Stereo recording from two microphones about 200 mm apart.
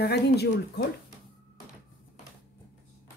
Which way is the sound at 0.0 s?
55° left (ahead or behind).